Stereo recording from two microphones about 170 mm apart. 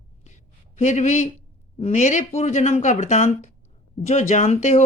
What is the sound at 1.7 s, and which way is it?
A man's voice, 40° left (ahead or behind).